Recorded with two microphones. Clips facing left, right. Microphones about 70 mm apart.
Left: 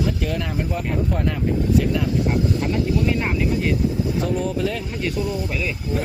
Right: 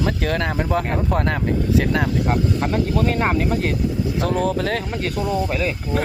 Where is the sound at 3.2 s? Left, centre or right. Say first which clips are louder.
Right 3 dB; right.